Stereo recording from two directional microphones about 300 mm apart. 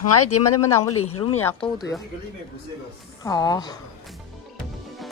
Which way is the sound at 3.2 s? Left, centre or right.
Centre.